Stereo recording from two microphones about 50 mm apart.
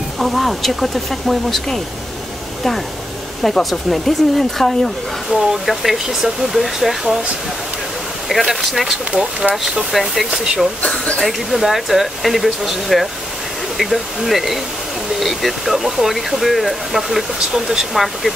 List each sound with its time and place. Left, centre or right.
0.2 s speech: centre
3.4 s speech: centre
8.3 s speech: centre
9.9 s speech: centre
10.3 s speech: centre
11.1 s speech: centre